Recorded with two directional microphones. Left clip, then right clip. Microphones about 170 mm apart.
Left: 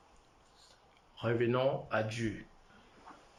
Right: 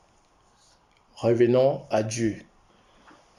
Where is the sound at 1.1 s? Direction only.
30° right (ahead or behind).